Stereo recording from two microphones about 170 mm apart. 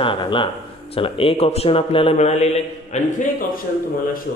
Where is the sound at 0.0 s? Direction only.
30° left (ahead or behind); by 3.6 s 50° left (ahead or behind).